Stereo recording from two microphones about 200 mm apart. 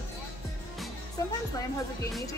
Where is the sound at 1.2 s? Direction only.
20° left (ahead or behind).